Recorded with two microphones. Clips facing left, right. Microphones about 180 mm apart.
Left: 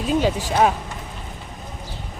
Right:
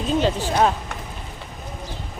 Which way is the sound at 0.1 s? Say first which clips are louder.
Left 1 dB; 10° left (ahead or behind).